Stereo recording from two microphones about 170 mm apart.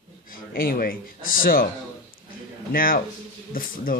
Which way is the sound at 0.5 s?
60° left (ahead or behind).